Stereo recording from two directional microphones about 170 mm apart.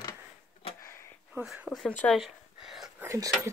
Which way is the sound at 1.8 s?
5° left (ahead or behind).